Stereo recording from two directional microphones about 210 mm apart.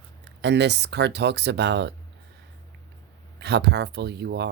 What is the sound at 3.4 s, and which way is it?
Speech, 55° right (ahead or behind).